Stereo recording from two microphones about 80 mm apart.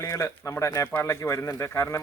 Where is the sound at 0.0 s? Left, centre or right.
Left.